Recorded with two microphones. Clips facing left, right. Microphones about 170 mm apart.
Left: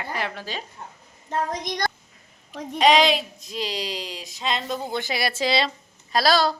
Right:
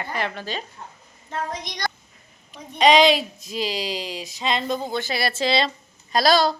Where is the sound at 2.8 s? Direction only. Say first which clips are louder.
Right 2 dB; centre (ahead or behind).